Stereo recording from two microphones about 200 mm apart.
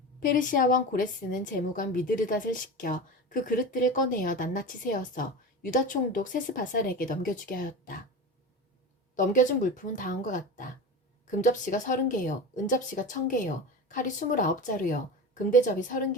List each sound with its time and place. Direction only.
0.2 s a woman's voice: 40° left (ahead or behind)
9.1 s speech: 40° left (ahead or behind)